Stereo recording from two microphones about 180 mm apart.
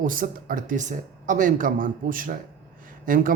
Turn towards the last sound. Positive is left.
turn(degrees=-50)  # may be behind; listen again after turning